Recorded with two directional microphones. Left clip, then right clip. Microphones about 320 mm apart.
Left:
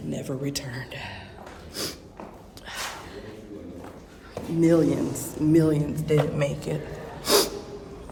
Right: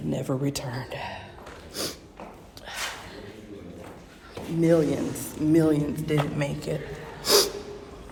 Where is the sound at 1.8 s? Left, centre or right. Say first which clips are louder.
Even; centre.